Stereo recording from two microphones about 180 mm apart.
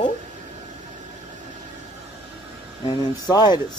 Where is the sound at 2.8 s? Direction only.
25° left (ahead or behind).